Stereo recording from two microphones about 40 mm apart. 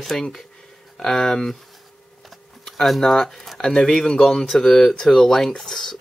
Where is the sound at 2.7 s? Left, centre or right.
Centre.